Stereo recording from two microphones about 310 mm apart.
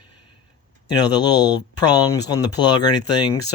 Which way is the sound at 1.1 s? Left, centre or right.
Centre.